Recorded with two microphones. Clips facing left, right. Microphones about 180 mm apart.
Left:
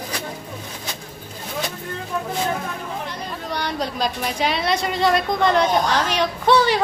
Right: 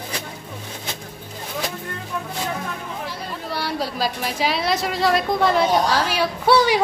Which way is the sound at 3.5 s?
5° right (ahead or behind).